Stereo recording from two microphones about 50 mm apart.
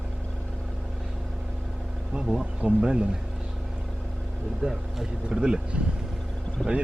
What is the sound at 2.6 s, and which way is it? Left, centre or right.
Speech, right.